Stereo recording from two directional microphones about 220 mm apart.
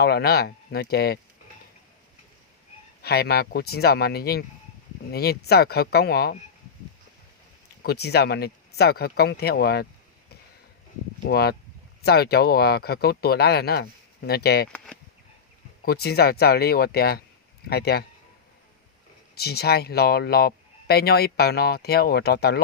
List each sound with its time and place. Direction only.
0.0 s speech: 45° left (ahead or behind)
3.0 s speech: 45° left (ahead or behind)
7.8 s speech: 45° left (ahead or behind)
11.3 s speech: 45° left (ahead or behind)
15.8 s speech: 45° left (ahead or behind)
19.4 s speech: 45° left (ahead or behind)